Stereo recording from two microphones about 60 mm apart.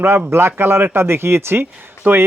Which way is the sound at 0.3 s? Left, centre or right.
Right.